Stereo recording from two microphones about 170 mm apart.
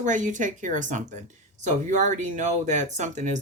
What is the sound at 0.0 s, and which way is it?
Speech, 45° right (ahead or behind).